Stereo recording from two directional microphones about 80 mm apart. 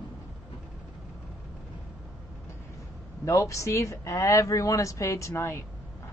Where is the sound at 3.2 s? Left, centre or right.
Left.